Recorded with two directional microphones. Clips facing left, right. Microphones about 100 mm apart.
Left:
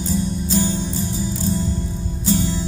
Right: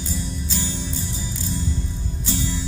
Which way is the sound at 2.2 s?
40° left (ahead or behind).